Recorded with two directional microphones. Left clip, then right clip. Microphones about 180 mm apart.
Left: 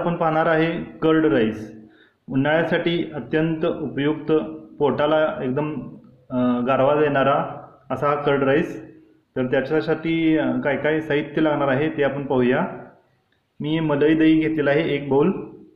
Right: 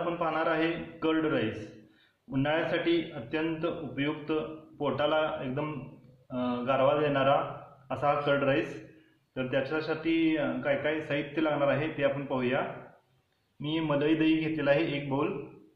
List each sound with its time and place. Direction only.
0.2 s a man's voice: 45° left (ahead or behind)
13.6 s a man's voice: 45° left (ahead or behind)